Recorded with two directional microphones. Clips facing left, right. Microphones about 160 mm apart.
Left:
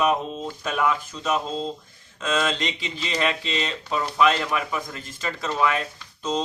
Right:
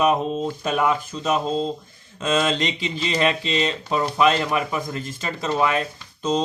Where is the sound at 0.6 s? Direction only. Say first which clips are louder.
Right 1 dB; 25° right (ahead or behind).